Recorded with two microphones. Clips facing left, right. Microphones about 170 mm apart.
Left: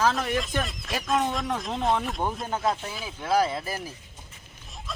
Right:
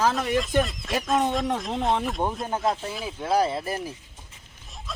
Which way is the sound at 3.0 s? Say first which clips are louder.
Right 1 dB; 30° right (ahead or behind).